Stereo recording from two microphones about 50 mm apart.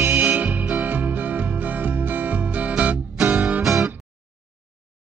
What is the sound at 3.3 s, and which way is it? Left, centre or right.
Music, right.